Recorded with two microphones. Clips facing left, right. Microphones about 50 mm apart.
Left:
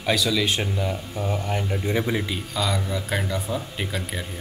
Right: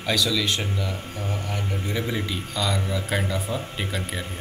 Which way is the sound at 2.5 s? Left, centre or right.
Centre.